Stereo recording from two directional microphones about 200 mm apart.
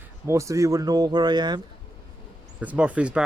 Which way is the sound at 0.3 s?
15° right (ahead or behind).